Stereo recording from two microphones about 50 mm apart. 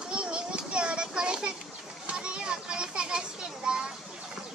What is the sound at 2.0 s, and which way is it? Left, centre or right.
Children playing, centre.